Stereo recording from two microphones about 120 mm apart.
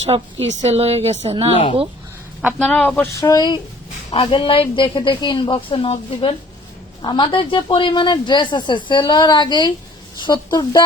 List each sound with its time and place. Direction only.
0.0 s a woman's voice: 60° right (ahead or behind)
2.6 s speech: 10° left (ahead or behind)
3.2 s a woman's voice: 30° left (ahead or behind)